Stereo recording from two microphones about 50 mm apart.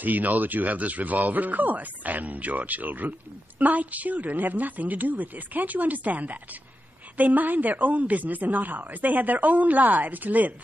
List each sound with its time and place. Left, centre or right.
0.0 s speech: right